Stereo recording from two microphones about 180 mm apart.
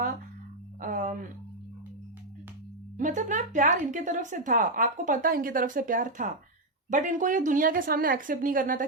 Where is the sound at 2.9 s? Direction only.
45° right (ahead or behind).